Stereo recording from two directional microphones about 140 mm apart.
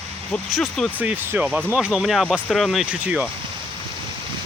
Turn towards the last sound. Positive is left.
turn(degrees=-10)  # may be behind; listen again after turning